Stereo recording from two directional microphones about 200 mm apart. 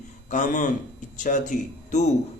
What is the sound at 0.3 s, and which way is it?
A man's voice, 40° left (ahead or behind).